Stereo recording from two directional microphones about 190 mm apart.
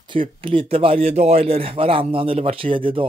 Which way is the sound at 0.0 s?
25° right (ahead or behind).